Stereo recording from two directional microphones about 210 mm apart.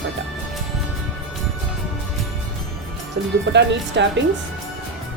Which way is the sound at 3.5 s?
55° right (ahead or behind).